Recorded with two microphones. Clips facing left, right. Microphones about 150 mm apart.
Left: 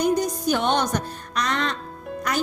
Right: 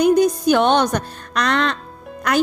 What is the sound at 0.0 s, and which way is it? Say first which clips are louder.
A woman's voice: right 7 dB; 65° right (ahead or behind).